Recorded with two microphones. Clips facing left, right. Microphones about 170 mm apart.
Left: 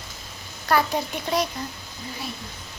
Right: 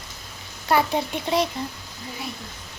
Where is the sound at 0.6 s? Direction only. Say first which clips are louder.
Right 1 dB; 25° right (ahead or behind).